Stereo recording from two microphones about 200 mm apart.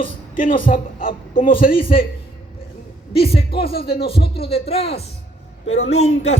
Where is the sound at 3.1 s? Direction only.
30° left (ahead or behind).